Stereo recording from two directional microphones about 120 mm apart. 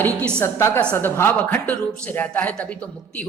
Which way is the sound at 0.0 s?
10° left (ahead or behind).